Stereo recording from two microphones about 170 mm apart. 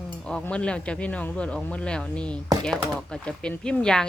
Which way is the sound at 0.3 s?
5° left (ahead or behind).